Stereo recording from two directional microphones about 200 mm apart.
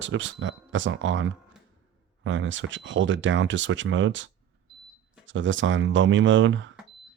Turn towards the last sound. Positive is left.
turn(degrees=-70)  # may be behind; listen again after turning